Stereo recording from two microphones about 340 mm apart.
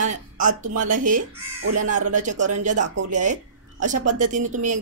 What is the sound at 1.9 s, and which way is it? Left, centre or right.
Speech, right.